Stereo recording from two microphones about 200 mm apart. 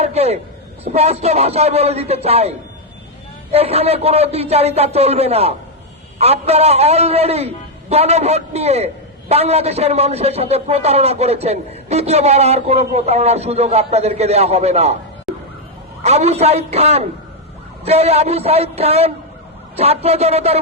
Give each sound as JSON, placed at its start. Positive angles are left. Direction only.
{"t": 0.0, "sound": "a man's voice", "side_deg": -30}
{"t": 3.5, "sound": "a man's voice", "side_deg": -30}
{"t": 15.3, "sound": "emergency vehicle", "side_deg": 0}
{"t": 16.0, "sound": "a man's voice", "side_deg": -30}